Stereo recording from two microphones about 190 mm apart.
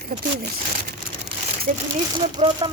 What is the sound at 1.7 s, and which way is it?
Speech, 40° right (ahead or behind).